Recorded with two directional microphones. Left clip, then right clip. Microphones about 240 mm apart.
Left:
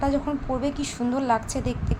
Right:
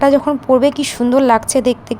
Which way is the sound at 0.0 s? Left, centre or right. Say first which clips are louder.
Right 13 dB; right.